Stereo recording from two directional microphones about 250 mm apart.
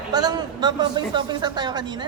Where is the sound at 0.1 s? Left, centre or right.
Centre.